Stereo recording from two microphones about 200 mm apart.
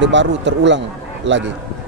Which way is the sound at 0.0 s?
65° right (ahead or behind).